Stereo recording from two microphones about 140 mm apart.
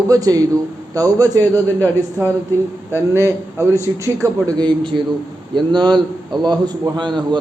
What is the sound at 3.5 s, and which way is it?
A man's voice, 20° right (ahead or behind).